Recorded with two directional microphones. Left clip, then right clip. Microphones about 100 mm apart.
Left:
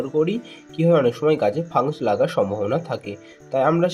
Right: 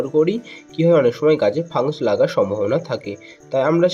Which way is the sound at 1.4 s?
20° right (ahead or behind).